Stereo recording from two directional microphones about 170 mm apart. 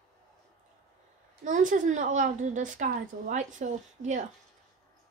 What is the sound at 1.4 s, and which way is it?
A child's voice, 50° right (ahead or behind).